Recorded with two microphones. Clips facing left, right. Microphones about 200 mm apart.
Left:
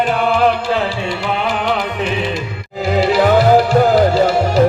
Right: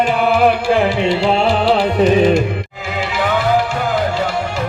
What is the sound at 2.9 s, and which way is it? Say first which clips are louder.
Music: left 7 dB; 40° left (ahead or behind).